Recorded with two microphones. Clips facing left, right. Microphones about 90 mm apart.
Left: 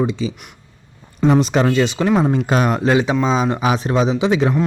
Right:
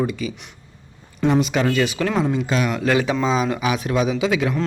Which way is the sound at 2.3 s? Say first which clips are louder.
Left 4 dB; 50° left (ahead or behind).